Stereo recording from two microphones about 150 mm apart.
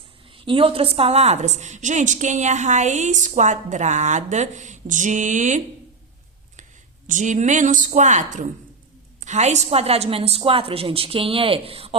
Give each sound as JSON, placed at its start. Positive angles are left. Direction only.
{"t": 0.3, "sound": "a woman's voice", "side_deg": -35}
{"t": 7.1, "sound": "a woman's voice", "side_deg": -55}